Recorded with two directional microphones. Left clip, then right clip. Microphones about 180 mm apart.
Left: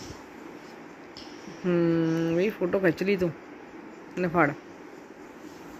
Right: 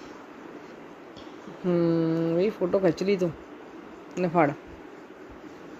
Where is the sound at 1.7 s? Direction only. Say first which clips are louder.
Even; 25° right (ahead or behind).